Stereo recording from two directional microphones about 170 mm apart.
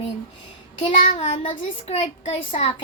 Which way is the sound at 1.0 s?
35° left (ahead or behind).